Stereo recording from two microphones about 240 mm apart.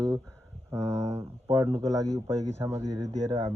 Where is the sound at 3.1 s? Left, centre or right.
Right.